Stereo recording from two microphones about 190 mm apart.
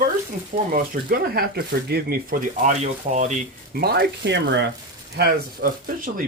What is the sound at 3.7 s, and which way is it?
Speech, 55° right (ahead or behind).